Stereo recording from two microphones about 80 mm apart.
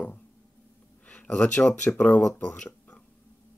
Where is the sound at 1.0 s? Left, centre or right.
Centre.